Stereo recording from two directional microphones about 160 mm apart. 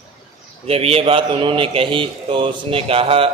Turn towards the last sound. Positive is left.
turn(degrees=-35)  # may be behind; listen again after turning